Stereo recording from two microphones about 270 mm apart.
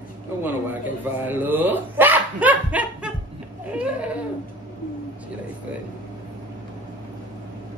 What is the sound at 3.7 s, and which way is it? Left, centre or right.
Laughter, centre.